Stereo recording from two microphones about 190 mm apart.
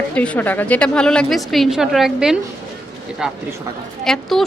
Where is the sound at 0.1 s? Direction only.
5° left (ahead or behind).